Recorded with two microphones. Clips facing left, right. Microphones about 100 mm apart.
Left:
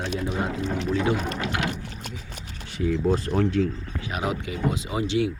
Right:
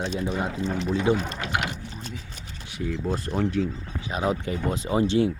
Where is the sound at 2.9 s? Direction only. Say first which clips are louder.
Left 5 dB; centre (ahead or behind).